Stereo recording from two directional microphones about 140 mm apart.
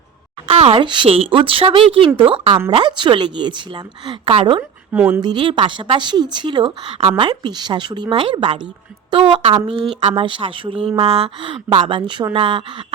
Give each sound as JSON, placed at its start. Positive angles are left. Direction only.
{"t": 0.5, "sound": "a woman's voice", "side_deg": -45}
{"t": 4.9, "sound": "speech", "side_deg": -15}
{"t": 5.2, "sound": "a woman's voice", "side_deg": -35}